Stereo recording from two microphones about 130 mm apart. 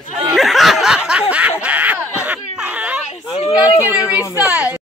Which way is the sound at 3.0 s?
50° left (ahead or behind).